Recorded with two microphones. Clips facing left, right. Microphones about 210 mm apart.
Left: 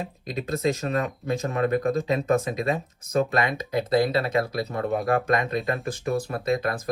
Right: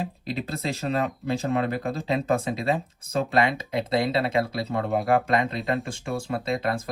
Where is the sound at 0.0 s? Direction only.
30° right (ahead or behind).